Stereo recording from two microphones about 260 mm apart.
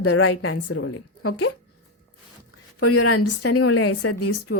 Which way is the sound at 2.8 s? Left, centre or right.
Left.